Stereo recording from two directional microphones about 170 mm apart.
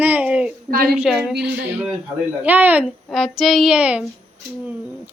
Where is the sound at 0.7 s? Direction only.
60° right (ahead or behind).